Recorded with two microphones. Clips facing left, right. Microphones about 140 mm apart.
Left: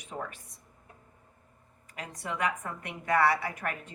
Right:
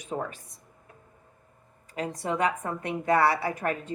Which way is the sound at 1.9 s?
30° right (ahead or behind).